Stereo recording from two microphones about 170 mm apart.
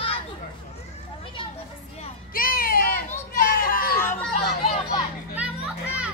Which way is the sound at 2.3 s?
55° left (ahead or behind).